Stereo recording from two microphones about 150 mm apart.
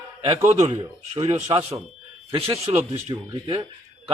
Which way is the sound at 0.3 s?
50° right (ahead or behind).